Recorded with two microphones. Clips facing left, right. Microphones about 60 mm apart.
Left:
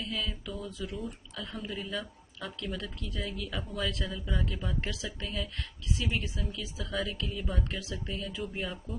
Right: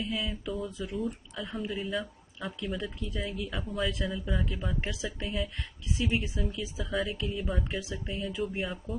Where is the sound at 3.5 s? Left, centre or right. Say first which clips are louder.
Right 2 dB; centre.